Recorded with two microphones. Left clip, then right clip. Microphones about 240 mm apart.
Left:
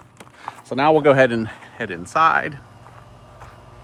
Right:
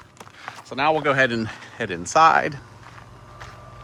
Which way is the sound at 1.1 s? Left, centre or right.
Centre.